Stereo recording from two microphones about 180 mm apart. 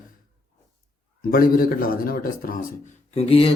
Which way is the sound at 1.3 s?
55° left (ahead or behind).